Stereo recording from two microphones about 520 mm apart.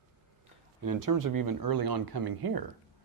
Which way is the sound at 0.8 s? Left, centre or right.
Right.